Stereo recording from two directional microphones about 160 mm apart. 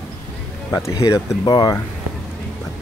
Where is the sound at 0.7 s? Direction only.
20° left (ahead or behind).